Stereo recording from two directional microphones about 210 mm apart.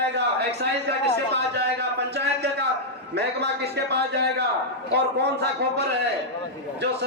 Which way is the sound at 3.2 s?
50° right (ahead or behind).